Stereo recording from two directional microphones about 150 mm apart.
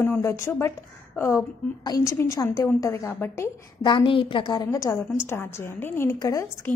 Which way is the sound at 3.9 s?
35° left (ahead or behind).